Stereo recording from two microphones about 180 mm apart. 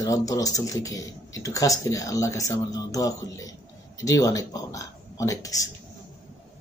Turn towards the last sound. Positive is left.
turn(degrees=20)  # may be behind; listen again after turning